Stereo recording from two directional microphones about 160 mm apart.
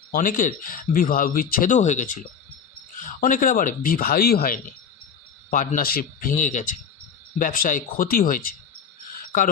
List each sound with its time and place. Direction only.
0.1 s speech: 60° left (ahead or behind)
3.2 s speech: 55° left (ahead or behind)
5.5 s speech: 60° left (ahead or behind)